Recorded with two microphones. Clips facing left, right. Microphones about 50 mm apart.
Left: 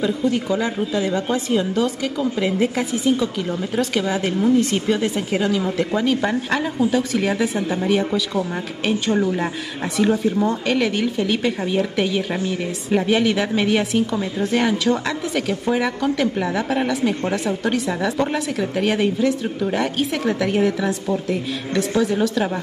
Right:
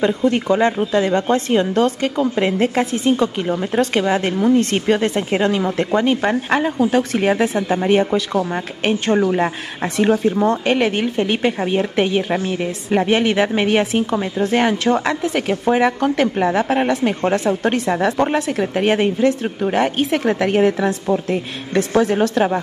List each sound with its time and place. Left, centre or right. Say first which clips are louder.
0.0 s a woman's voice: right 4 dB; right
6.8 s a woman's voice: right 3 dB; right
7.4 s a woman's voice: right 3 dB; right